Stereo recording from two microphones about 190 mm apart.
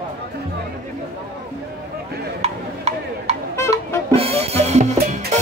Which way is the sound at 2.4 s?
35° right (ahead or behind).